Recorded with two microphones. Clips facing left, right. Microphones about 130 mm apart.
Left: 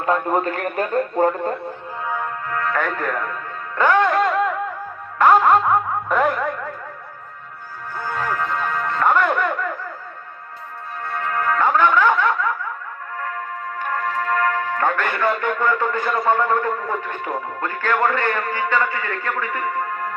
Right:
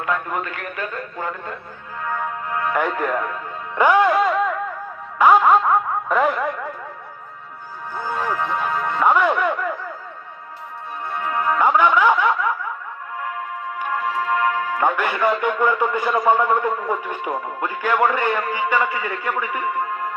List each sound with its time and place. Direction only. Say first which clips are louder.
0.0 s a man's voice: left 5 dB; 35° left (ahead or behind)
2.5 s speech: right 1 dB; 15° right (ahead or behind)
3.8 s music: right 1 dB; 10° right (ahead or behind)
7.9 s music: right 1 dB; 15° right (ahead or behind)
11.0 s music: even; 15° right (ahead or behind)
13.1 s speech: even; 15° right (ahead or behind)